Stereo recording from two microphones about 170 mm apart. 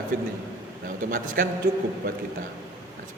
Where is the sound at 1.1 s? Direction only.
55° right (ahead or behind).